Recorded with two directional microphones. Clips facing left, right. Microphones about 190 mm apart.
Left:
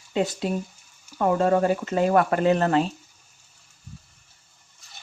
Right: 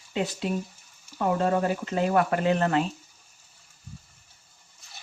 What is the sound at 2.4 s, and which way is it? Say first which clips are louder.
Speech: left 3 dB; 35° left (ahead or behind).